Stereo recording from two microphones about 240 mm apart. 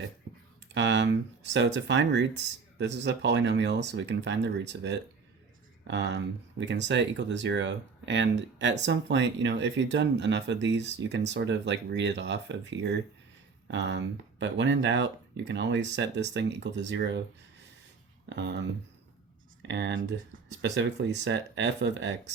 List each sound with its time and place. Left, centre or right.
0.3 s a sound: right
0.7 s speech: right
18.3 s speech: right
19.6 s speech: right